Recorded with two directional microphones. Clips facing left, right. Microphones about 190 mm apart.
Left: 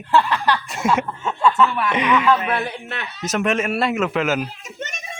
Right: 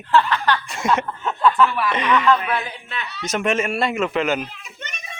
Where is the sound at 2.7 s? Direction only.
65° left (ahead or behind).